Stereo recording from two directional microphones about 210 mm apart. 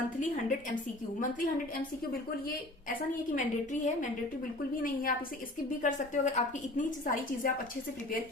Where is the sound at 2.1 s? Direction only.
40° left (ahead or behind).